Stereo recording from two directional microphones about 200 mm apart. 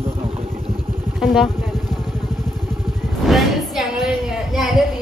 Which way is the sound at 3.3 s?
Centre (ahead or behind).